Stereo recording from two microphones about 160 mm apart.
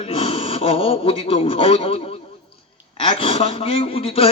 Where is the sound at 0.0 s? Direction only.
40° left (ahead or behind).